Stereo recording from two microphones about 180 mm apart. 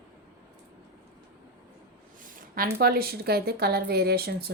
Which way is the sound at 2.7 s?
55° right (ahead or behind).